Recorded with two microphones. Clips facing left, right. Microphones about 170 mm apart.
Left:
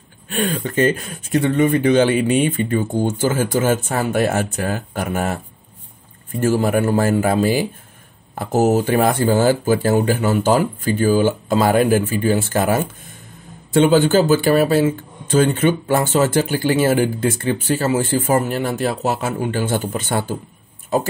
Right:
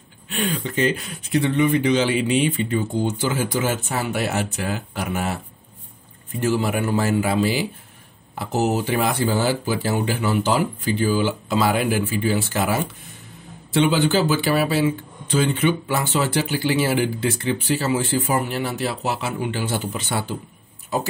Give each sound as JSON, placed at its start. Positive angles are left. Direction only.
{"t": 0.3, "sound": "speech", "side_deg": 50}
{"t": 6.4, "sound": "speech", "side_deg": 45}